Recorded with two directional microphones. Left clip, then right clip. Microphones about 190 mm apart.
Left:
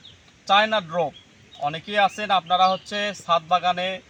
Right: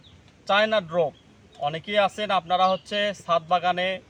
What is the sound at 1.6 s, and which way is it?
A man's voice, 25° right (ahead or behind).